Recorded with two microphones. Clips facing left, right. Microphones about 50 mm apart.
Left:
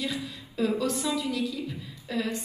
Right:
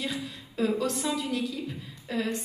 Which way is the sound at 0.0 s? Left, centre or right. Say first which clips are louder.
Left 1 dB; right.